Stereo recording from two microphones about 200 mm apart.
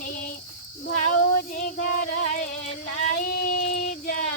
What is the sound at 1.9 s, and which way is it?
Music, 45° left (ahead or behind).